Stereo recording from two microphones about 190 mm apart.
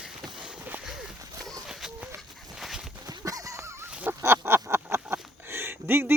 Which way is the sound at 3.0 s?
20° right (ahead or behind).